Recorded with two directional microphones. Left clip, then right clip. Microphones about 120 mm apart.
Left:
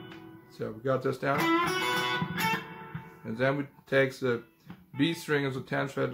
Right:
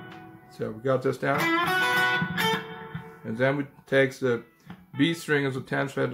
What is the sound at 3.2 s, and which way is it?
Speech, 15° right (ahead or behind).